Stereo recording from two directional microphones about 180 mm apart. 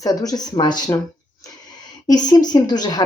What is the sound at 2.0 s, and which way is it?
Speech, 20° left (ahead or behind).